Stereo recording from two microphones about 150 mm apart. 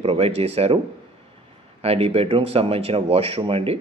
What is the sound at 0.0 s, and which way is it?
Speech, 40° right (ahead or behind).